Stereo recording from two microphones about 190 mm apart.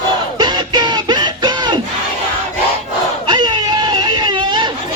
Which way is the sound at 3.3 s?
25° right (ahead or behind).